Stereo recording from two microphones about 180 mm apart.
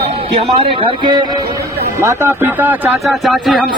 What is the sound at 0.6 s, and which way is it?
Speech, 30° right (ahead or behind).